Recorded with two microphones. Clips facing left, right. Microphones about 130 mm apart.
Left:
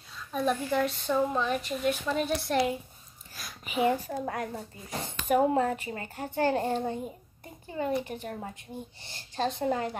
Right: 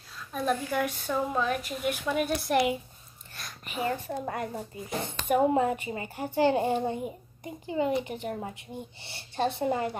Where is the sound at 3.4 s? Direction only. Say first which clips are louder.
Left 5 dB; 5° left (ahead or behind); by 8.5 s 10° right (ahead or behind).